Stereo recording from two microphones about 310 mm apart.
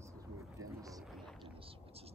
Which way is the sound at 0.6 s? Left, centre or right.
Centre.